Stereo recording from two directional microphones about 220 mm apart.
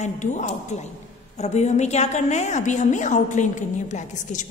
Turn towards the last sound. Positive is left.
turn(degrees=35)  # may be behind; listen again after turning